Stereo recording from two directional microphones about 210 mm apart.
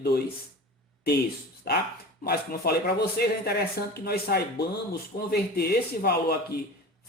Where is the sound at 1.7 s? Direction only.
50° left (ahead or behind).